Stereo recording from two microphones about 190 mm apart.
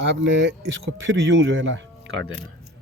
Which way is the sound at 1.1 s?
75° right (ahead or behind).